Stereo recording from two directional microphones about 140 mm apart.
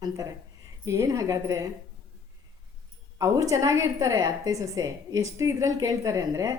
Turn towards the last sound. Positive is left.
turn(degrees=-25)  # may be behind; listen again after turning